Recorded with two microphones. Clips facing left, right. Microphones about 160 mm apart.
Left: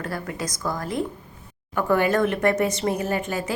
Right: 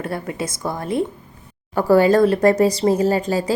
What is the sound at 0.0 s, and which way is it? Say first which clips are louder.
A woman's voice: right 4 dB; 25° right (ahead or behind).